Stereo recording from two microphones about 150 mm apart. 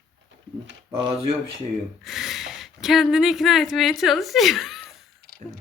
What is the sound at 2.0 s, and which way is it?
Speech, centre (ahead or behind).